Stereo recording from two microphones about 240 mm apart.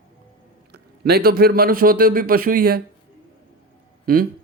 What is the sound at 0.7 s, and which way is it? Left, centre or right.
Speech, right.